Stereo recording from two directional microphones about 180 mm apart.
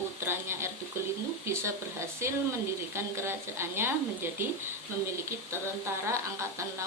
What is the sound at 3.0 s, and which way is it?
Speech, 15° right (ahead or behind).